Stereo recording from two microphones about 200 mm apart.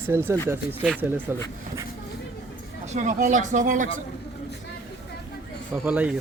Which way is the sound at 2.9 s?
40° right (ahead or behind).